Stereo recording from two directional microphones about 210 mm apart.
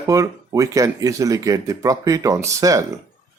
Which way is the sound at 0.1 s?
15° right (ahead or behind).